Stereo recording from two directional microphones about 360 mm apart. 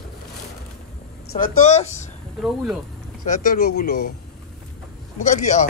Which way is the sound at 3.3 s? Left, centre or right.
Left.